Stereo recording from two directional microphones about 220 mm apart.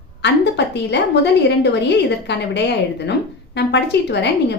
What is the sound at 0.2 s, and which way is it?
A woman's voice, 50° left (ahead or behind).